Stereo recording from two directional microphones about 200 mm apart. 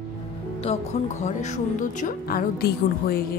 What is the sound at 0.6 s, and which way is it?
Speech, 35° left (ahead or behind).